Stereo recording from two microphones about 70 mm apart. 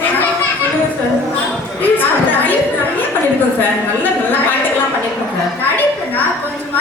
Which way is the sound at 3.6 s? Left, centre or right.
Left.